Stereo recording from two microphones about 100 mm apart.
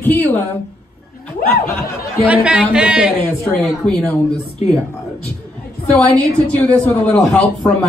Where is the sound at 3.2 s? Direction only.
15° left (ahead or behind).